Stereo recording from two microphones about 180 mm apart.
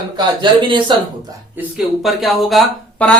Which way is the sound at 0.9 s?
25° right (ahead or behind).